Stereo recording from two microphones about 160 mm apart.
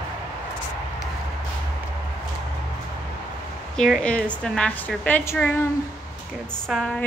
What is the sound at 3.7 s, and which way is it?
A woman's voice, 5° left (ahead or behind).